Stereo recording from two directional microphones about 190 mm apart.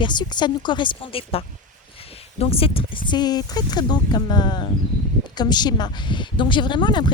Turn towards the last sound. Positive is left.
turn(degrees=25)  # may be behind; listen again after turning